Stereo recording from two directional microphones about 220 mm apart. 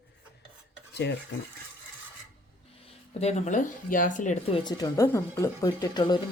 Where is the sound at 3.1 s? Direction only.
30° left (ahead or behind).